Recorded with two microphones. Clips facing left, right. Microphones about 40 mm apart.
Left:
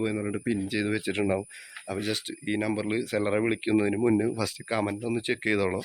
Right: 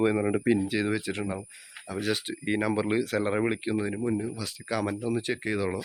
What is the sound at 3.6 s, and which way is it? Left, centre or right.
Speech, left.